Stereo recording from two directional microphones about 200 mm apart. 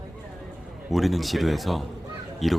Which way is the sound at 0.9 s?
Centre (ahead or behind).